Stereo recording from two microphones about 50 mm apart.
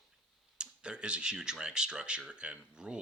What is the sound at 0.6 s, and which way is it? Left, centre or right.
Speech, centre.